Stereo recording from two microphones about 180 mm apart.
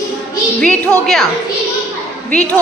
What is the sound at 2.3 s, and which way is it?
Speech, 5° left (ahead or behind).